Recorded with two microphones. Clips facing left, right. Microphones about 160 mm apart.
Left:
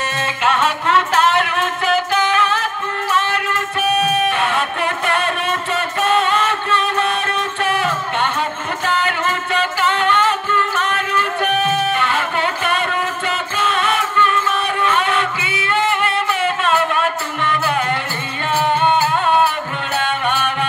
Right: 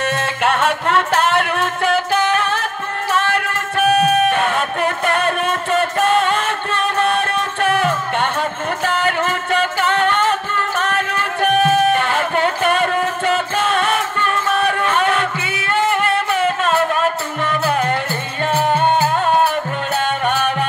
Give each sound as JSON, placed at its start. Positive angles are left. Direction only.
{"t": 0.0, "sound": "music", "side_deg": -55}